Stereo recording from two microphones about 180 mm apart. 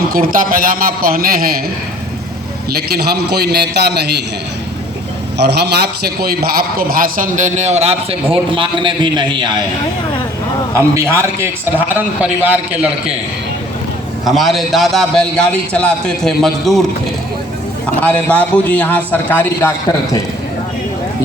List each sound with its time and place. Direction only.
0.1 s a man's voice: 50° right (ahead or behind)
2.9 s a man's voice: 60° right (ahead or behind)
5.4 s a man's voice: 70° right (ahead or behind); by 9.5 s 25° right (ahead or behind)
10.8 s a man's voice: 15° right (ahead or behind)
14.3 s a man's voice: centre (ahead or behind)
18.0 s a man's voice: 10° left (ahead or behind)